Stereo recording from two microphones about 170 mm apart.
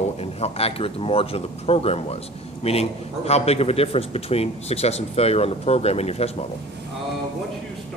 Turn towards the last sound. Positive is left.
turn(degrees=35)  # may be behind; listen again after turning